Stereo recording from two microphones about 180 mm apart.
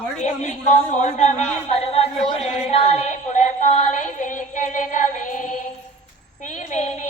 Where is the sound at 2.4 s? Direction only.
35° left (ahead or behind).